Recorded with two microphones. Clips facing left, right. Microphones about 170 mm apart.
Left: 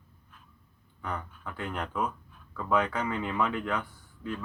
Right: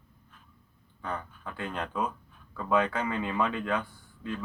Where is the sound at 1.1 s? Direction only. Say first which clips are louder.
Right 1 dB; 20° right (ahead or behind).